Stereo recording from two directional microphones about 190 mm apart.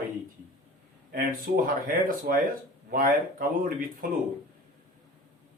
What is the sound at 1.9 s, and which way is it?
Speech, 50° right (ahead or behind).